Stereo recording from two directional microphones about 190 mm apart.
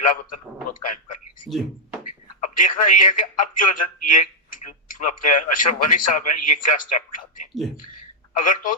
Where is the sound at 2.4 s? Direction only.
45° left (ahead or behind).